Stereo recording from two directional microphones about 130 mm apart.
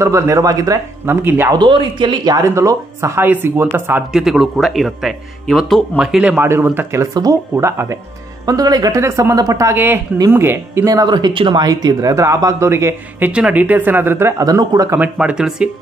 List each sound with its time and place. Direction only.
0.0 s speech: 25° right (ahead or behind)
1.5 s speech: 35° right (ahead or behind)
2.4 s speech: 25° right (ahead or behind)
4.1 s speech: 5° right (ahead or behind)
6.4 s speech: 15° right (ahead or behind)
13.3 s speech: 10° right (ahead or behind); by 15.0 s 30° right (ahead or behind)
15.0 s speech: 10° right (ahead or behind)